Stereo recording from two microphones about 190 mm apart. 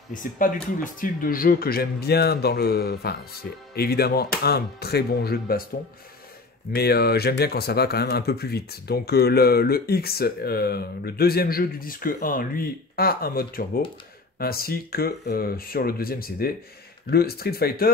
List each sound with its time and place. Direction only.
0.1 s speech: 45° left (ahead or behind)
6.7 s speech: 55° left (ahead or behind)